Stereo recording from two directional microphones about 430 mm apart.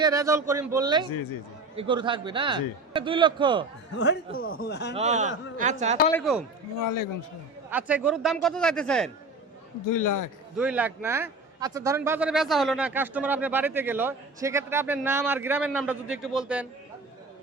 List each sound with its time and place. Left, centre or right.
0.0 s a man's voice: centre
3.9 s a man's voice: left
4.9 s a man's voice: centre
6.1 s a man's voice: centre
6.7 s speech: left
7.7 s a man's voice: centre
9.8 s speech: left
10.6 s a man's voice: centre